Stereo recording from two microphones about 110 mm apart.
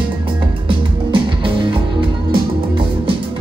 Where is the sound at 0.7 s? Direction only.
50° right (ahead or behind).